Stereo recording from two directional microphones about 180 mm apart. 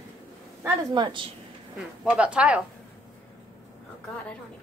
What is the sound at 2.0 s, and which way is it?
Speech, 5° right (ahead or behind).